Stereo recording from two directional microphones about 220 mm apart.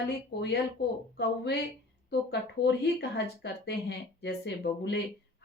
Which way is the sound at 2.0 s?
50° left (ahead or behind).